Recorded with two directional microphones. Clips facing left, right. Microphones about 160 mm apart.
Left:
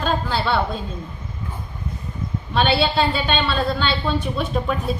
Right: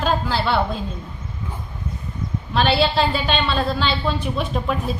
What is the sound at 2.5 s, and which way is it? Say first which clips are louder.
A woman's voice: right 1 dB; centre (ahead or behind).